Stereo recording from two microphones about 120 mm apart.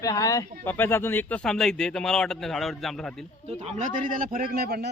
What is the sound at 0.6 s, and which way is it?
Speech, 15° left (ahead or behind).